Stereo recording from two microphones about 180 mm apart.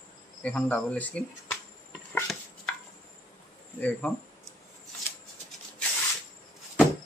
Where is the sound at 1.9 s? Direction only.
Centre (ahead or behind).